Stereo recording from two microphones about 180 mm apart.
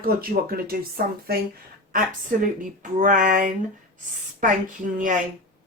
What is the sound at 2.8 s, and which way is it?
Speech, 45° right (ahead or behind).